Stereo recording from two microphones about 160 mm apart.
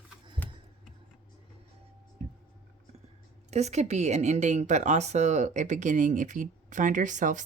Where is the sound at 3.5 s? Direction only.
45° right (ahead or behind).